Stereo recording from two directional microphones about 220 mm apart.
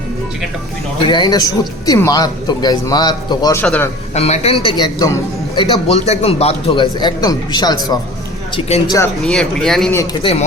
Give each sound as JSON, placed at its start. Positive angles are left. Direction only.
{"t": 1.0, "sound": "speech", "side_deg": 20}
{"t": 4.1, "sound": "speech", "side_deg": 30}
{"t": 5.9, "sound": "speech", "side_deg": 30}
{"t": 9.1, "sound": "speech", "side_deg": 0}